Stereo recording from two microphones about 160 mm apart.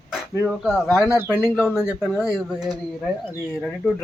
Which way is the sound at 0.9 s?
20° left (ahead or behind).